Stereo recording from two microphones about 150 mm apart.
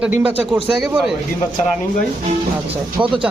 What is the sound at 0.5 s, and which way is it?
Speech, 15° right (ahead or behind).